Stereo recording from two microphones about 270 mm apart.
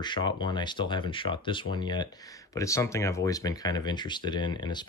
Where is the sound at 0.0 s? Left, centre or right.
Centre.